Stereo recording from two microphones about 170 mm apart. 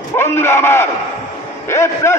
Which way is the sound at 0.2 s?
15° left (ahead or behind).